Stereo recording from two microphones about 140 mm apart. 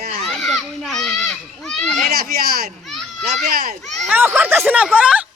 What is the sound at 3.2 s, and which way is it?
Speech, 55° right (ahead or behind).